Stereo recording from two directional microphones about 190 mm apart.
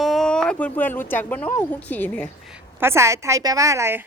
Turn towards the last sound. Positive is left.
turn(degrees=-15)  # may be behind; listen again after turning